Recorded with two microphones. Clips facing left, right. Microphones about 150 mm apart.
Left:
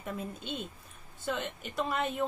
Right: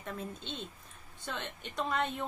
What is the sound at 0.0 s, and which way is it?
A woman's voice, 10° left (ahead or behind).